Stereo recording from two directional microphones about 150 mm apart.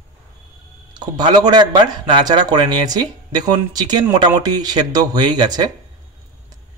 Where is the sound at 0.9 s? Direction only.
30° right (ahead or behind).